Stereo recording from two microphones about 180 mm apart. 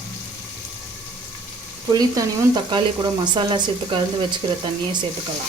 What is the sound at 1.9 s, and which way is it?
Speech, 20° right (ahead or behind).